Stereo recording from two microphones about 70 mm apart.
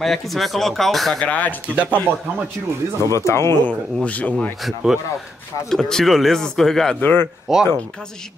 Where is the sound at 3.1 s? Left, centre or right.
Left.